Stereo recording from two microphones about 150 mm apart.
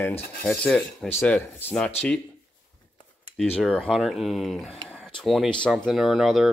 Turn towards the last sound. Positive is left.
turn(degrees=0)  # may be behind; listen again after turning